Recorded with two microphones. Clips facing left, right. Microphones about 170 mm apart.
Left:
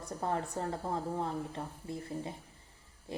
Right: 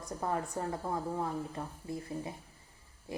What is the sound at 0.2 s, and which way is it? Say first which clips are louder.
Speech: even; 30° left (ahead or behind).